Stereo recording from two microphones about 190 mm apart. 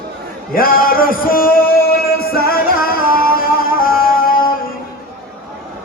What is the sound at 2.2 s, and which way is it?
Music, 50° left (ahead or behind).